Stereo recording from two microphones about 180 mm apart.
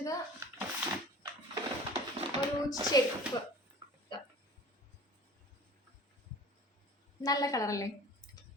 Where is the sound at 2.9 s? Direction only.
20° left (ahead or behind).